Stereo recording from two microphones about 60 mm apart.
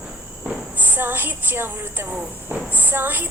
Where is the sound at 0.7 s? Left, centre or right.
Right.